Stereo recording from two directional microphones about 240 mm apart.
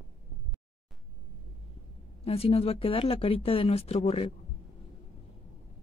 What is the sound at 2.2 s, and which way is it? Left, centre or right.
Speech, left.